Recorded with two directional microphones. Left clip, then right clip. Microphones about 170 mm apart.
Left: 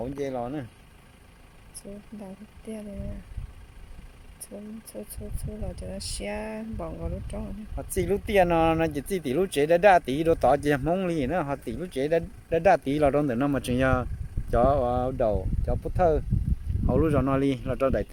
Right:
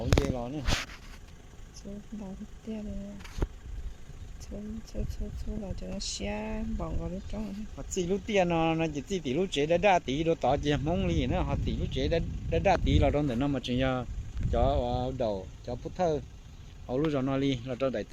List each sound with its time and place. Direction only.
0.0 s a sound: 40° left (ahead or behind)
2.7 s speech: centre (ahead or behind)
4.9 s speech: 10° left (ahead or behind)
7.8 s speech: 50° left (ahead or behind); by 16.2 s 90° left
16.9 s speech: 80° left